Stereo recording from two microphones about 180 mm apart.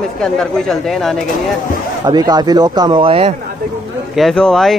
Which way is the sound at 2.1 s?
20° right (ahead or behind).